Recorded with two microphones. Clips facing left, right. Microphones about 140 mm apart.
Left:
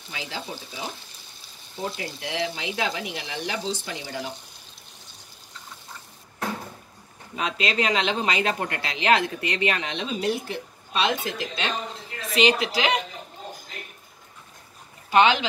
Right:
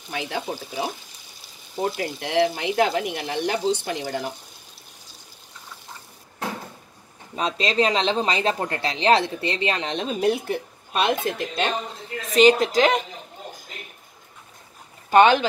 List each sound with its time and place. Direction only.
0.1 s speech: 55° right (ahead or behind)
7.3 s speech: 35° right (ahead or behind)
15.0 s speech: 50° right (ahead or behind)